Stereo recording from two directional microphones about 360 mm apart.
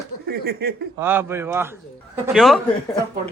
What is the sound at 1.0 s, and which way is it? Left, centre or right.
A man's voice, centre.